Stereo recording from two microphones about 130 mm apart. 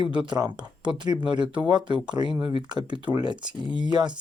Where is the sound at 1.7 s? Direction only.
35° right (ahead or behind).